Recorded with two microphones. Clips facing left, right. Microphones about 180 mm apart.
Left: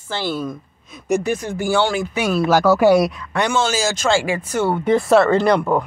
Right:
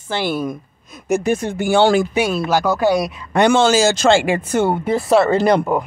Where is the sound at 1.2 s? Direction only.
25° right (ahead or behind).